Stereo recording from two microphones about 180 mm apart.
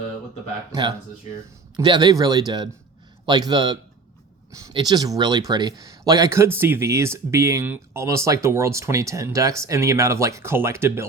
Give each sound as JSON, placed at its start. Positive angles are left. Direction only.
{"t": 0.7, "sound": "speech", "side_deg": -25}